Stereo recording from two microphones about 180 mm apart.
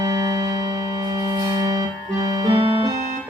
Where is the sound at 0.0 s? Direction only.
20° right (ahead or behind).